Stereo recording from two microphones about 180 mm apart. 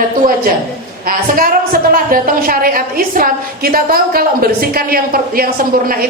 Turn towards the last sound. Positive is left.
turn(degrees=-50)  # may be behind; listen again after turning